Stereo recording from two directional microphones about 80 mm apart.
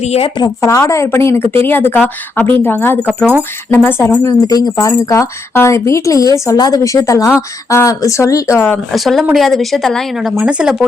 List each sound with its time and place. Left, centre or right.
0.6 s speech: left
4.2 s speech: left
5.5 s speech: left
6.6 s speech: left
8.9 s a woman's voice: centre
10.2 s speech: centre